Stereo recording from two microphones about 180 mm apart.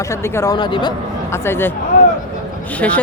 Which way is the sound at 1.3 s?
15° left (ahead or behind).